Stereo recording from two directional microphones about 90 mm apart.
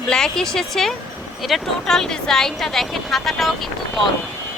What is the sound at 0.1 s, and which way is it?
A woman's voice, 5° left (ahead or behind).